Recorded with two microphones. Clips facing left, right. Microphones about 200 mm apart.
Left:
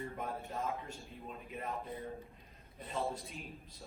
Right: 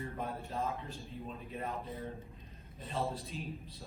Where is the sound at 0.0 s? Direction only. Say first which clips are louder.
Right 1 dB; 30° right (ahead or behind).